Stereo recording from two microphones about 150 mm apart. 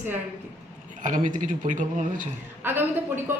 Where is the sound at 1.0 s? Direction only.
60° right (ahead or behind).